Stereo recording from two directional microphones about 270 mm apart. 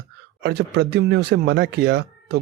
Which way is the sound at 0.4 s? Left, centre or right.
Right.